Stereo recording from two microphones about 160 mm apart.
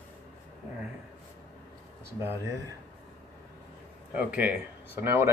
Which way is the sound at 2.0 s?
15° right (ahead or behind).